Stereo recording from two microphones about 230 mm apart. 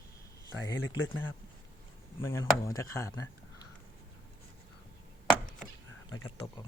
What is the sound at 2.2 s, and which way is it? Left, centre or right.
Speech, centre.